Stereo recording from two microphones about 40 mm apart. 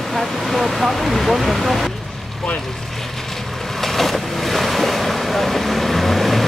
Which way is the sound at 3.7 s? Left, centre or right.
Centre.